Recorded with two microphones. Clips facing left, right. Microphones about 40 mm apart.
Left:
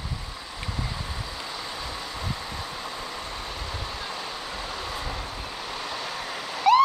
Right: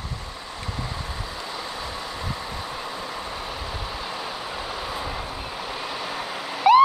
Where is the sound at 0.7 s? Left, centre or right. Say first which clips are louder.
Right 1 dB; centre.